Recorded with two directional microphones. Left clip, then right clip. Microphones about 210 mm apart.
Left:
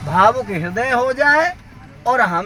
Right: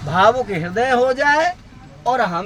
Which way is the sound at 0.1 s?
5° right (ahead or behind).